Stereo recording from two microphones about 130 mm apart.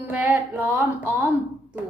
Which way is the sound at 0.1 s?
10° right (ahead or behind).